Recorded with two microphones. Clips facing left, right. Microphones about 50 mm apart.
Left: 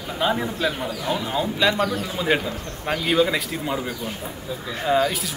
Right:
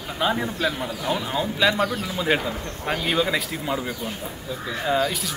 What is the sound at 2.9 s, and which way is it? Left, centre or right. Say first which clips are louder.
Speech: left 3 dB; centre.